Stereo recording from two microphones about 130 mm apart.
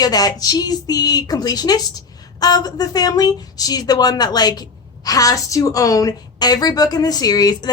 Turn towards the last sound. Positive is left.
turn(degrees=30)  # may be behind; listen again after turning